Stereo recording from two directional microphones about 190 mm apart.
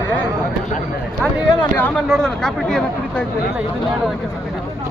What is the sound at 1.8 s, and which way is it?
Speech, 5° left (ahead or behind).